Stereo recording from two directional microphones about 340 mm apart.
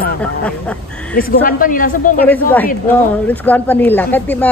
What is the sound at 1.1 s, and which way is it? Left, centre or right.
Speech, left.